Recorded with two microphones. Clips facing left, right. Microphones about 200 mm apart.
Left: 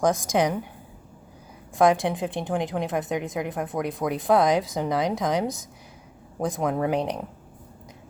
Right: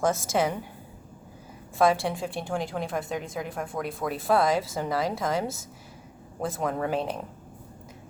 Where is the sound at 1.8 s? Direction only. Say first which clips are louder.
Left 3 dB; 15° left (ahead or behind).